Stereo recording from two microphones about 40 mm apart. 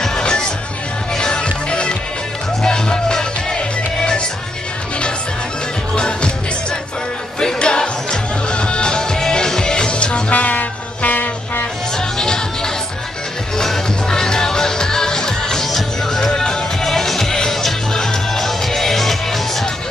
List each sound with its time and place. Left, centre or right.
0.0 s music: centre
5.9 s music: left
7.3 s music: left
10.3 s music: left
12.2 s music: centre